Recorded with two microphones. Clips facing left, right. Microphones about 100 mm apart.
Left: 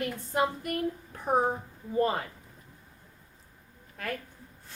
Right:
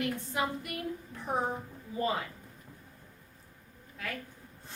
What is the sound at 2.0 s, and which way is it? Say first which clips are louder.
Speech: left 5 dB; 50° left (ahead or behind).